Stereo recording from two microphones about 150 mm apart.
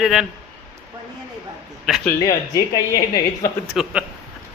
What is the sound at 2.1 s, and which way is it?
Speech, 20° left (ahead or behind).